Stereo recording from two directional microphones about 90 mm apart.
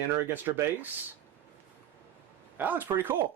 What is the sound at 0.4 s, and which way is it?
Speech, 20° right (ahead or behind).